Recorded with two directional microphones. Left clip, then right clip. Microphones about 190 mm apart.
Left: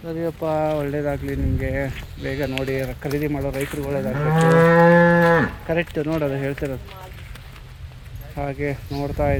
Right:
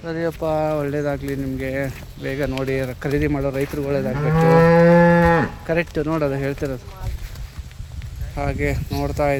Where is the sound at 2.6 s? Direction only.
20° right (ahead or behind).